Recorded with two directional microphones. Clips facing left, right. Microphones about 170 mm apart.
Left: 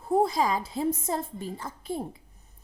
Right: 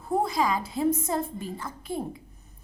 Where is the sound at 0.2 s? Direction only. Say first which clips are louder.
Left 1 dB; 30° left (ahead or behind).